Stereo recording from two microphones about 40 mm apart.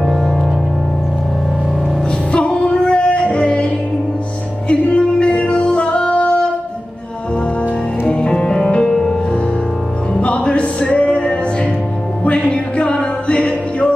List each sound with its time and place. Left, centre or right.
0.0 s music: centre
2.3 s music: left
4.6 s music: left
8.1 s music: left
10.1 s music: left